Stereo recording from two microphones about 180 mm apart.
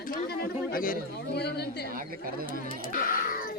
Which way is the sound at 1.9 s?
50° right (ahead or behind).